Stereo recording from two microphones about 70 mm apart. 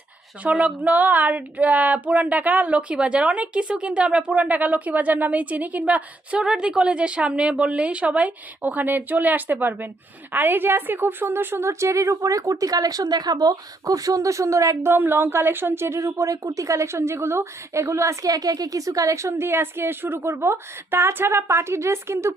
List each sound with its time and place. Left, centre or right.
0.4 s a woman's voice: right
14.8 s speech: right